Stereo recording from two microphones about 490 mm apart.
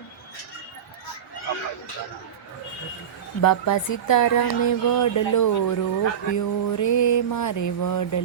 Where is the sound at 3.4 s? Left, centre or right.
Left.